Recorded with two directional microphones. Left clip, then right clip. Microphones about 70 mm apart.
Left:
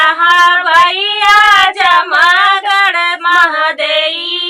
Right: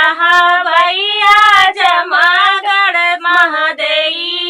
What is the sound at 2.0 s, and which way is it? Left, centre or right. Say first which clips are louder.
Female singing: left 2 dB; left.